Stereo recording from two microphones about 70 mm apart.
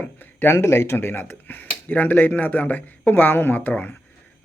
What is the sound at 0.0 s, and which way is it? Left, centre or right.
Speech, left.